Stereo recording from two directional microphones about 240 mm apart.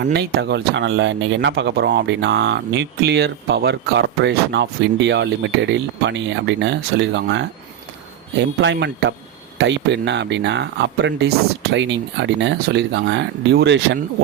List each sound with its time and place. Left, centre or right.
0.0 s speech: right
8.6 s speech: right